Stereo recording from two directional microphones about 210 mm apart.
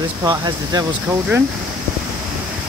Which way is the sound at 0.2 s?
15° right (ahead or behind).